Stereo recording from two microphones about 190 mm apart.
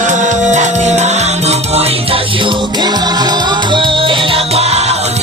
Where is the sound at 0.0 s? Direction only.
40° right (ahead or behind).